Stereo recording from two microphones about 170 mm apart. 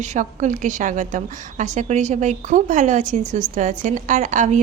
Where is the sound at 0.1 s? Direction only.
45° right (ahead or behind).